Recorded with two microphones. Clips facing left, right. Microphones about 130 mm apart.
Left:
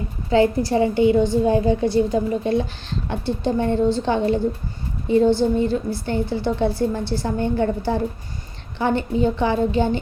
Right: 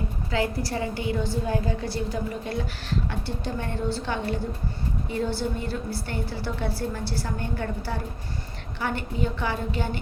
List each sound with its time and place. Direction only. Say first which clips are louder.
0.3 s a woman's voice: left 10 dB; 25° left (ahead or behind)